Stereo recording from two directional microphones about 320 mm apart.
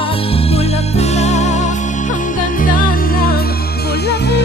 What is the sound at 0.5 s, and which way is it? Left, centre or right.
Music, centre.